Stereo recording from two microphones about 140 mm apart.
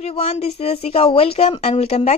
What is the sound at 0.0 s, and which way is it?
A woman's voice, 45° left (ahead or behind).